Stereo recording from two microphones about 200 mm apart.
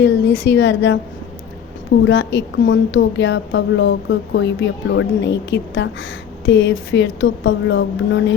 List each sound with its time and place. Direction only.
0.0 s a woman's voice: 60° left (ahead or behind)
2.0 s a woman's voice: 65° left (ahead or behind)